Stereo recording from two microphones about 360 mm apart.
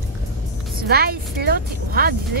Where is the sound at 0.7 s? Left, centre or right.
Right.